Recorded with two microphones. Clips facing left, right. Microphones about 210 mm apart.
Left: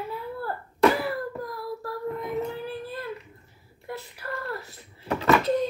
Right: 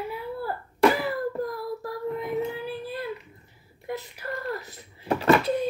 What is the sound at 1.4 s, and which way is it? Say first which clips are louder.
Child singing: right 2 dB; 20° right (ahead or behind).